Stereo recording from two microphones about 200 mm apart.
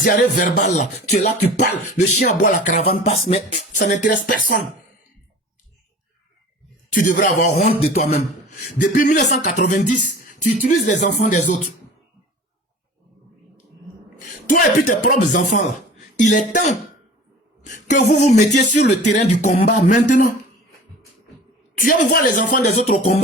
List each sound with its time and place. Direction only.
0.0 s music: 40° left (ahead or behind)
3.0 s music: 30° left (ahead or behind)
4.3 s speech: 65° left (ahead or behind)
6.9 s music: 40° left (ahead or behind)
14.4 s music: 40° left (ahead or behind)
15.4 s speech: 40° left (ahead or behind)
18.0 s music: 35° left (ahead or behind)
21.8 s music: 40° left (ahead or behind)